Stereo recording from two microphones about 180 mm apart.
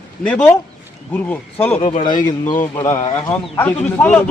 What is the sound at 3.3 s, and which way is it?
Speech, 10° left (ahead or behind).